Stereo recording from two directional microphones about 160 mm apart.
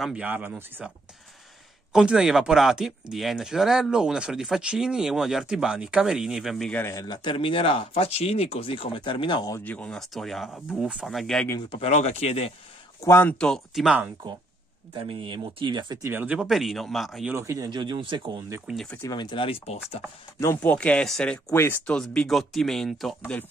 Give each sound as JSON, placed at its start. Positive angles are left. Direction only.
{"t": 0.0, "sound": "speech", "side_deg": -10}
{"t": 6.8, "sound": "speech", "side_deg": 20}
{"t": 9.6, "sound": "speech", "side_deg": 10}
{"t": 11.7, "sound": "speech", "side_deg": 40}
{"t": 13.0, "sound": "speech", "side_deg": 15}
{"t": 15.0, "sound": "speech", "side_deg": -30}
{"t": 16.1, "sound": "speech", "side_deg": -10}
{"t": 17.3, "sound": "speech", "side_deg": -15}
{"t": 18.7, "sound": "speech", "side_deg": 0}
{"t": 19.0, "sound": "speech", "side_deg": 30}
{"t": 20.3, "sound": "speech", "side_deg": 15}